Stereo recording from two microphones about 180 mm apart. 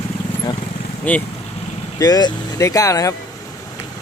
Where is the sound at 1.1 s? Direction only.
10° left (ahead or behind).